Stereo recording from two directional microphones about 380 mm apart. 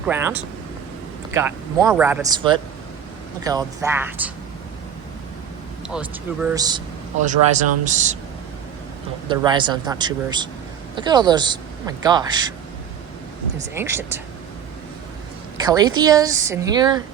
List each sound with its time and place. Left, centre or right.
0.0 s speech: centre
5.9 s speech: centre
9.3 s speech: centre
13.7 s speech: centre
15.6 s speech: centre